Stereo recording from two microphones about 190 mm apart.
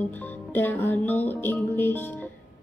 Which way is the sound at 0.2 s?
10° left (ahead or behind).